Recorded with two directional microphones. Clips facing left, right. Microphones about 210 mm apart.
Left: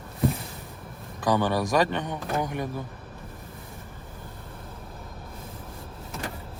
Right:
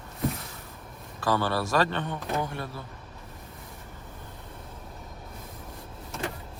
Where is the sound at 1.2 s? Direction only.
15° left (ahead or behind).